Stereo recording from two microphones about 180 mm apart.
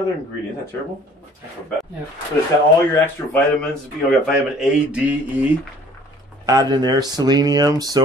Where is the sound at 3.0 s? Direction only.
10° left (ahead or behind).